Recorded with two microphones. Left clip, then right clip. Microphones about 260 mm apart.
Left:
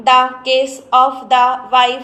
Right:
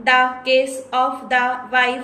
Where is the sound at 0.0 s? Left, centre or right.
Centre.